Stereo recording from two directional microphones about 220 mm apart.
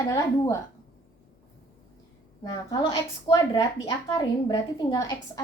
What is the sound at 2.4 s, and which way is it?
Speech, 15° left (ahead or behind).